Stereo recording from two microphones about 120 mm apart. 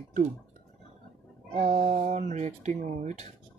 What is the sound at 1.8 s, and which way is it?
Speech, 90° right.